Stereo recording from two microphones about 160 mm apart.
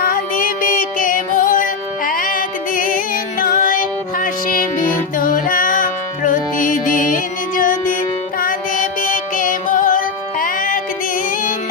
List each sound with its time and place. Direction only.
0.0 s music: 60° left (ahead or behind)